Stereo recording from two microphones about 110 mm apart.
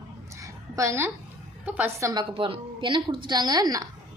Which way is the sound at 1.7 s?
15° right (ahead or behind).